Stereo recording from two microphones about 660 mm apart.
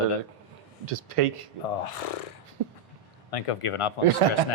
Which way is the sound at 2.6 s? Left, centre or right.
Right.